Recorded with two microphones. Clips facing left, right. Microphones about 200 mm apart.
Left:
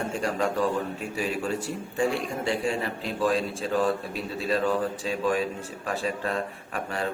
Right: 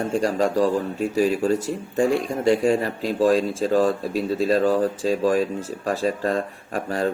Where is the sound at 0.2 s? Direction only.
35° right (ahead or behind).